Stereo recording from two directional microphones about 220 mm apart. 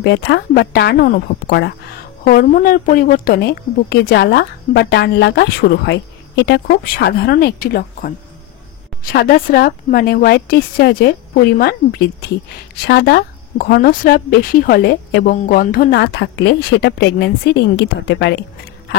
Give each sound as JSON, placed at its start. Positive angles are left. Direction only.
{"t": 0.0, "sound": "a woman's voice", "side_deg": 50}
{"t": 9.1, "sound": "a woman's voice", "side_deg": 45}